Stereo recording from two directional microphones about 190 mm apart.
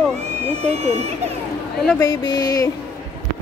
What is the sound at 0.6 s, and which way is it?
Speech, 35° right (ahead or behind).